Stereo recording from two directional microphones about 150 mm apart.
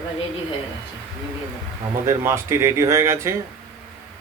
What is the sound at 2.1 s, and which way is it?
Speech, 15° right (ahead or behind).